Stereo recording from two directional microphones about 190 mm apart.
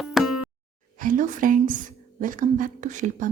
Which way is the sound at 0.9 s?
45° right (ahead or behind).